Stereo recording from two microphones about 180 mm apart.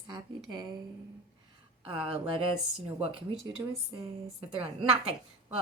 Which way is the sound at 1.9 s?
35° right (ahead or behind).